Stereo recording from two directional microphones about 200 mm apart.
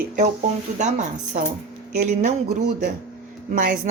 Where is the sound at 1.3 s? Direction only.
40° right (ahead or behind).